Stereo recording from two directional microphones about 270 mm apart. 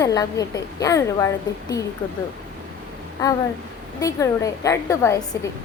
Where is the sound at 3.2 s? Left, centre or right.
Centre.